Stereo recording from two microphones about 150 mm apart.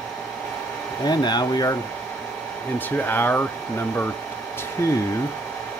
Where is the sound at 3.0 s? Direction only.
10° left (ahead or behind).